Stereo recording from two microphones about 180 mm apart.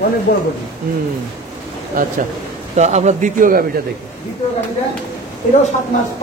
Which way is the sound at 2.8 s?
40° right (ahead or behind).